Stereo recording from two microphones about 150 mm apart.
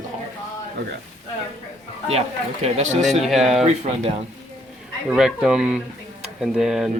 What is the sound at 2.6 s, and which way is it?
Speech, 50° right (ahead or behind).